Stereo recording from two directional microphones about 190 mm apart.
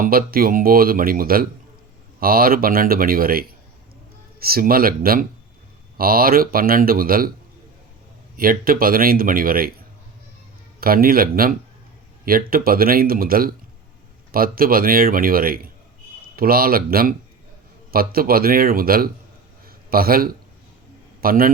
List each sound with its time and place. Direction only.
0.0 s speech: 50° right (ahead or behind)
8.4 s speech: 50° right (ahead or behind)
10.8 s speech: 50° right (ahead or behind)
19.6 s a sound: 50° right (ahead or behind)
21.2 s a man's voice: 50° right (ahead or behind)